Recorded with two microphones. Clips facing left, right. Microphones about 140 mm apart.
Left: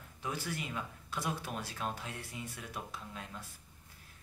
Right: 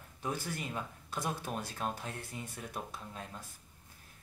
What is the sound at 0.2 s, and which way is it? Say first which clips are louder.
Speech: right 1 dB; 45° right (ahead or behind).